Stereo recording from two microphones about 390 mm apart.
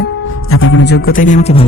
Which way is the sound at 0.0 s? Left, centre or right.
Left.